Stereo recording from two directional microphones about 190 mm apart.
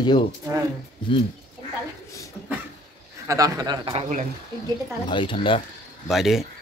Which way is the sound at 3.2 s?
20° right (ahead or behind).